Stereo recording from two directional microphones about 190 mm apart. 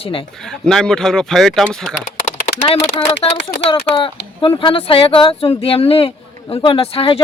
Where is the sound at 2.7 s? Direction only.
30° left (ahead or behind).